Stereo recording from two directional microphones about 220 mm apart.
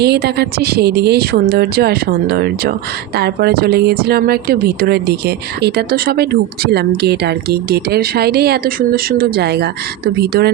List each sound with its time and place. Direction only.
0.0 s speech: 50° right (ahead or behind)